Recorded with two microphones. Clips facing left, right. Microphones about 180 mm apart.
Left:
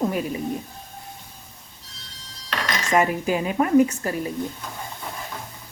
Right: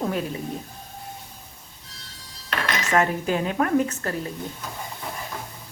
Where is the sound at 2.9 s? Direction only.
10° left (ahead or behind).